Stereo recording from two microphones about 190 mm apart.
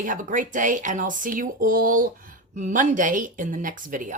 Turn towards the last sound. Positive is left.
turn(degrees=-45)  # may be behind; listen again after turning